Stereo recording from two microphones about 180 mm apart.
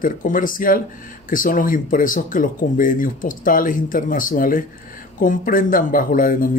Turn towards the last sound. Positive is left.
turn(degrees=50)  # may be behind; listen again after turning